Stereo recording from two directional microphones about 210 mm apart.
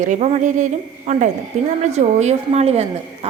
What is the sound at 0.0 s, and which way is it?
A woman's voice, 35° right (ahead or behind).